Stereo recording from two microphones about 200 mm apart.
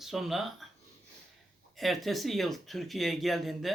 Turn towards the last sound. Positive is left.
turn(degrees=0)  # may be behind; listen again after turning